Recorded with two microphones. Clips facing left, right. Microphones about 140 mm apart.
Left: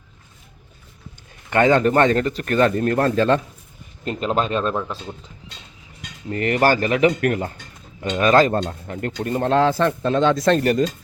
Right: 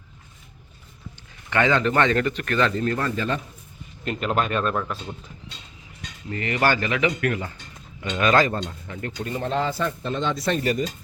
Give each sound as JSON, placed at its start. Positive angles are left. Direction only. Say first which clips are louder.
{"t": 1.5, "sound": "speech", "louder": "left 5 dB", "side_deg": 45}
{"t": 4.0, "sound": "speech", "louder": "left 2 dB", "side_deg": 30}
{"t": 6.3, "sound": "speech", "louder": "left 5 dB", "side_deg": 45}
{"t": 8.5, "sound": "speech", "louder": "left 7 dB", "side_deg": 50}
{"t": 9.5, "sound": "speech", "louder": "left 8 dB", "side_deg": 90}